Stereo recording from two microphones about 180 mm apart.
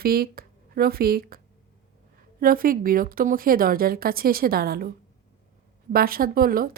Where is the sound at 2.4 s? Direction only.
50° right (ahead or behind).